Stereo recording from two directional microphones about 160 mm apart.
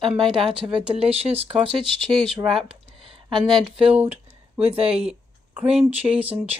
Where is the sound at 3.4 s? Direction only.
Centre (ahead or behind).